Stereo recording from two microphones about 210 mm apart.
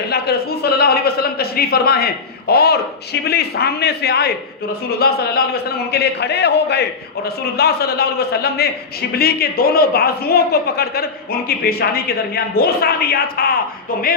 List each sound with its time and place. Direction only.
0.1 s speech: 50° left (ahead or behind)